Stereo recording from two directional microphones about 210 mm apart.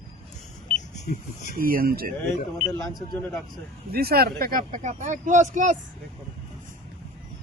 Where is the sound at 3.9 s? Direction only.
45° right (ahead or behind).